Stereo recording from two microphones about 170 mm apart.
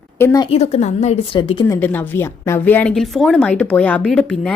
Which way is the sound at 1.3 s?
30° left (ahead or behind).